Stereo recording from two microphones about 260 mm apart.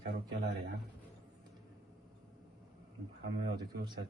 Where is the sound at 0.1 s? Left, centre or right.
Right.